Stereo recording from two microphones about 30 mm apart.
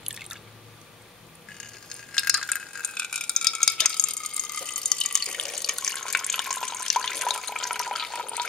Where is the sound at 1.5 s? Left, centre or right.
Left.